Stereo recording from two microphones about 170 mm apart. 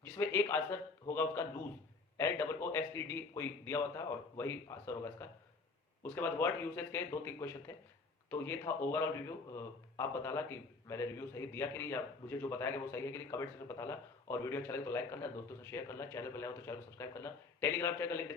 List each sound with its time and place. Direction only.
0.0 s a man's voice: 15° left (ahead or behind)